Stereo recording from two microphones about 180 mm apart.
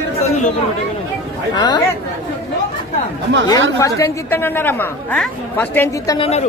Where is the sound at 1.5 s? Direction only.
25° left (ahead or behind).